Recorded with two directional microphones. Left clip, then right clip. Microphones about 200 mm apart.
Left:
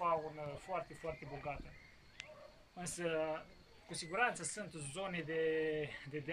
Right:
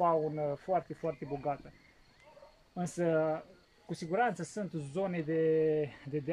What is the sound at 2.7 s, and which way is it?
Speech, 30° right (ahead or behind).